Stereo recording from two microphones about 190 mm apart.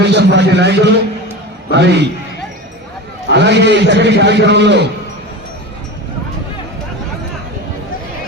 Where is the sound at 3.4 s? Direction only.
65° right (ahead or behind).